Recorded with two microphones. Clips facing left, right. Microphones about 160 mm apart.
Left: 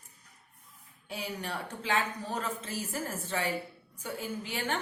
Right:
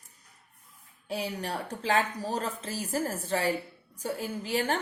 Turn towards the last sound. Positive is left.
turn(degrees=-35)  # may be behind; listen again after turning